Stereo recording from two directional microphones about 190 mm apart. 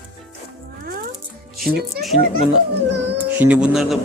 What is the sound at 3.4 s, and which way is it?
Speech, 5° right (ahead or behind).